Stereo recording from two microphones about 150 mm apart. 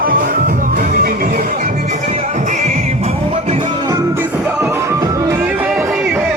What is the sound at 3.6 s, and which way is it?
Music, 25° right (ahead or behind).